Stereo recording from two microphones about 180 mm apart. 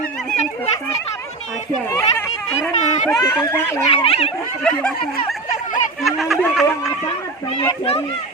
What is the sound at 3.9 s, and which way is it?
Speech, 30° left (ahead or behind).